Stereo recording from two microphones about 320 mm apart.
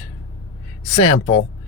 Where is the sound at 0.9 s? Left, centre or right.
Centre.